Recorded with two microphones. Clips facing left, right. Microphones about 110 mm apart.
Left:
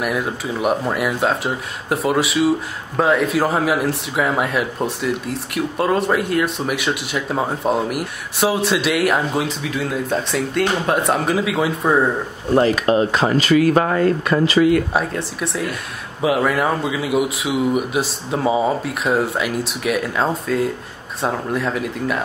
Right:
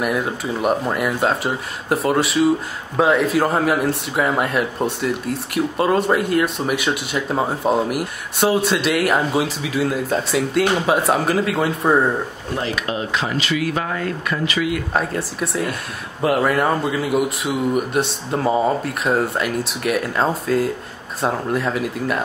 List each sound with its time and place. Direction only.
0.0 s a man's voice: centre (ahead or behind)
12.5 s speech: 40° left (ahead or behind)
15.0 s a man's voice: centre (ahead or behind)